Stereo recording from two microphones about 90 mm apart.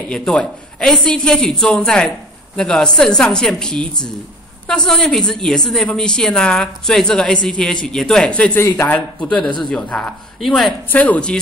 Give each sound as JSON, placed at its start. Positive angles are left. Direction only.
{"t": 0.1, "sound": "a man's voice", "side_deg": 10}
{"t": 8.5, "sound": "a man's voice", "side_deg": 25}
{"t": 10.4, "sound": "speech", "side_deg": 0}
{"t": 10.9, "sound": "a man's voice", "side_deg": 20}